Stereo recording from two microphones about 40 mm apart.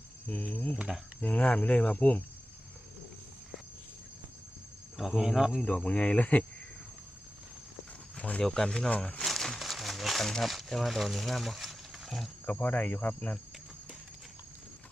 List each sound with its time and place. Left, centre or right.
0.3 s cricket: left
0.9 s speech: centre
1.2 s speech: left
4.9 s speech: centre
5.6 s speech: left
8.1 s a sound: left
8.4 s speech: centre
8.9 s speech: left
9.1 s crumpling: centre
9.6 s speech: centre
12.5 s speech: left